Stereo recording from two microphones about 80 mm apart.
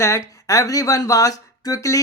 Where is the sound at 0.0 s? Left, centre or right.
Left.